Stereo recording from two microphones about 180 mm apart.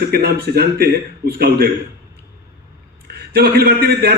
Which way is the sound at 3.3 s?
60° right (ahead or behind).